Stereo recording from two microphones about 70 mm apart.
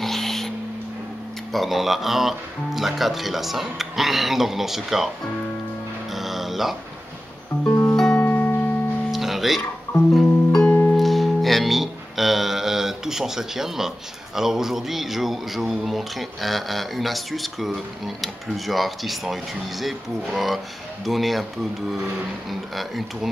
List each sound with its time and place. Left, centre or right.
0.0 s a sound: centre
1.5 s speech: centre
6.1 s music: centre
7.9 s music: centre
8.2 s music: left
9.1 s guitar: centre
9.9 s guitar: centre
10.7 s music: left
11.0 s speech: centre
22.5 s speech: centre